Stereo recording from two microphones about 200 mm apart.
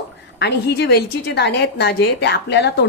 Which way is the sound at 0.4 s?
55° left (ahead or behind).